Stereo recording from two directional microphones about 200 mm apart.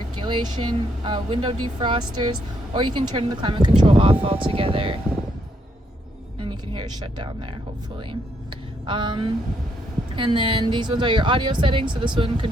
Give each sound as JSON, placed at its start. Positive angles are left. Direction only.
{"t": 0.2, "sound": "speech", "side_deg": -25}
{"t": 6.4, "sound": "speech", "side_deg": -20}